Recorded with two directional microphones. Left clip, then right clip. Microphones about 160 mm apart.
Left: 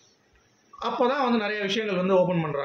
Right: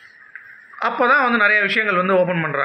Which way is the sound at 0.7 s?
35° left (ahead or behind).